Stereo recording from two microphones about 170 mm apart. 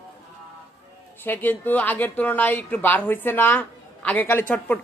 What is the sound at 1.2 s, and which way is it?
A woman's voice, 10° left (ahead or behind).